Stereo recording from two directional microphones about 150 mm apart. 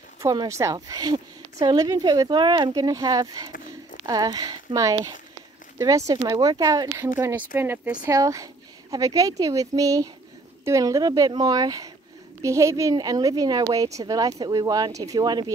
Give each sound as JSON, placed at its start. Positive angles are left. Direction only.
{"t": 0.2, "sound": "a woman's voice", "side_deg": -20}
{"t": 8.0, "sound": "a woman's voice", "side_deg": -20}